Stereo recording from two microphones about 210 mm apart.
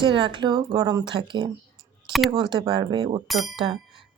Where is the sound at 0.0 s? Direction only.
25° right (ahead or behind).